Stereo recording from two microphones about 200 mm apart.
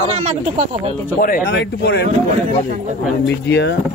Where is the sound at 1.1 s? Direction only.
45° left (ahead or behind).